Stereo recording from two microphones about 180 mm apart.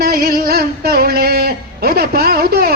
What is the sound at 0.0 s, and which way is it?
Music, 60° right (ahead or behind).